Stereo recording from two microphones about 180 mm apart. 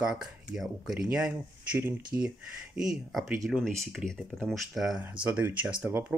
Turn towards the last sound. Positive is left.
turn(degrees=-10)  # may be behind; listen again after turning